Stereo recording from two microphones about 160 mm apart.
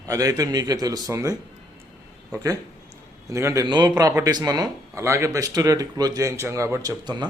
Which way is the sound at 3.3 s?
20° right (ahead or behind).